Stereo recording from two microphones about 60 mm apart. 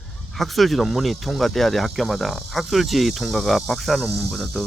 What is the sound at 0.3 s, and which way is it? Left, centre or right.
Speech, centre.